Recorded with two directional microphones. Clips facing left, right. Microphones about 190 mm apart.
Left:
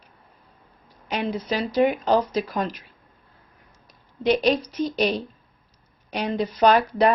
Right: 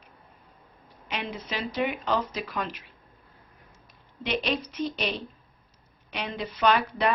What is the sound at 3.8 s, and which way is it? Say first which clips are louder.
A woman's voice: left 13 dB; 40° left (ahead or behind).